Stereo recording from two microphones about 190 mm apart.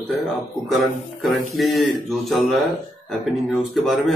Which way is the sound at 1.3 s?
Centre (ahead or behind).